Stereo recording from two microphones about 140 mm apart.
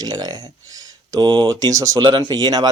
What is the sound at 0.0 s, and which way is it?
Speech, 30° right (ahead or behind).